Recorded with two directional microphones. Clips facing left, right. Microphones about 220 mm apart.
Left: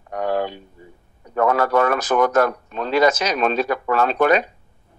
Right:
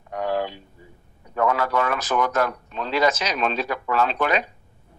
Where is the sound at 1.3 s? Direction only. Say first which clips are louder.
Left 4 dB; 50° left (ahead or behind).